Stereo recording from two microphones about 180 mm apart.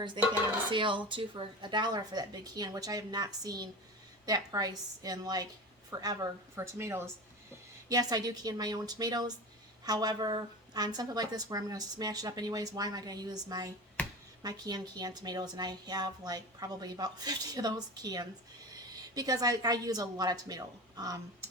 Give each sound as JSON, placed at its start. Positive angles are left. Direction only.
{"t": 0.7, "sound": "a woman's voice", "side_deg": -30}
{"t": 14.0, "sound": "a sound", "side_deg": 10}
{"t": 14.4, "sound": "a woman's voice", "side_deg": -20}